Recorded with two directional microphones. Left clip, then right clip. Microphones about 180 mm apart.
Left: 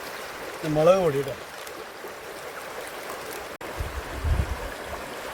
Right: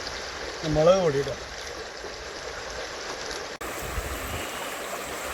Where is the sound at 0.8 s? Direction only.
10° left (ahead or behind).